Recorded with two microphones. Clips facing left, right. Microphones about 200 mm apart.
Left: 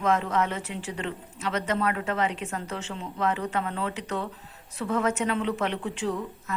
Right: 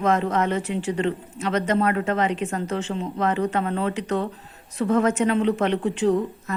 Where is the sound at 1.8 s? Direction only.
40° right (ahead or behind).